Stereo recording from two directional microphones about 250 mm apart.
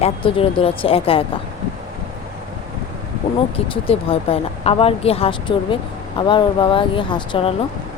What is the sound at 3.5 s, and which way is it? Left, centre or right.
Speech, left.